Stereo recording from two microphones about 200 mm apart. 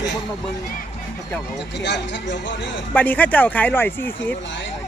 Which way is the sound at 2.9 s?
10° left (ahead or behind).